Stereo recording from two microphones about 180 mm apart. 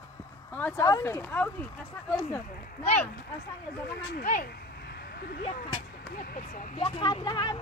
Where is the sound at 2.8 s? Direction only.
35° left (ahead or behind).